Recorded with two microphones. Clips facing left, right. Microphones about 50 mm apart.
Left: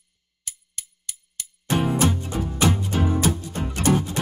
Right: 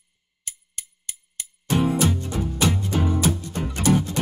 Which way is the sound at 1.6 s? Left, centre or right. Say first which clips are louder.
Right 1 dB; left.